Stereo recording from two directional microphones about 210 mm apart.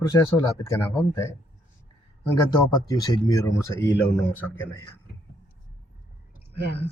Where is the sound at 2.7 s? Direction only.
20° left (ahead or behind).